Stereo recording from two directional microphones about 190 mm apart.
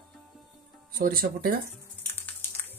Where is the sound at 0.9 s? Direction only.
50° right (ahead or behind).